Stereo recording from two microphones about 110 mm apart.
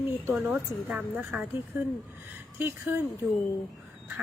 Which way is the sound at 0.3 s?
10° right (ahead or behind).